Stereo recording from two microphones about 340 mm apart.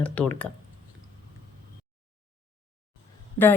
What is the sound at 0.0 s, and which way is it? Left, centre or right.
Speech, centre.